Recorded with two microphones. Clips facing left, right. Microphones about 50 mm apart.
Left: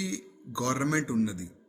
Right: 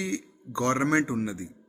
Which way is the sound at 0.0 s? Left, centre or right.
Right.